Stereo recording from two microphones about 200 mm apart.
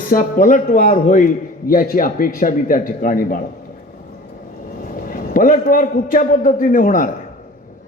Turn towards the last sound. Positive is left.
turn(degrees=40)  # may be behind; listen again after turning